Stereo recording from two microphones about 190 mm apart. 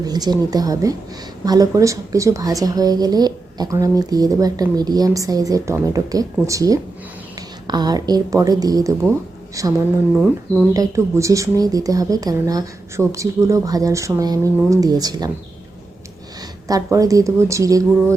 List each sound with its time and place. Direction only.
0.0 s a woman's voice: 20° right (ahead or behind)
10.8 s speech: 15° right (ahead or behind)
16.6 s speech: 20° right (ahead or behind)